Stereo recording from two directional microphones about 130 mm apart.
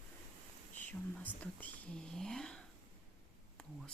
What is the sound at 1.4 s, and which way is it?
Speech, 10° left (ahead or behind).